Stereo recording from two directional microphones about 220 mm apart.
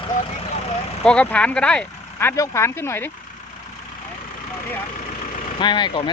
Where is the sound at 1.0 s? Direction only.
5° left (ahead or behind).